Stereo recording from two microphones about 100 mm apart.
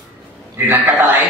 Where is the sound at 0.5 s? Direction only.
20° right (ahead or behind).